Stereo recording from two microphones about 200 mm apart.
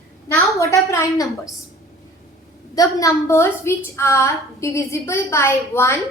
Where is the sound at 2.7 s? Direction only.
15° left (ahead or behind).